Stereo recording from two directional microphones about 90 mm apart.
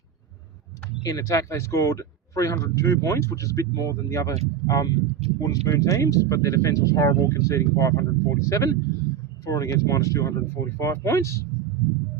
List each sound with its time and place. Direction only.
1.0 s speech: 40° left (ahead or behind)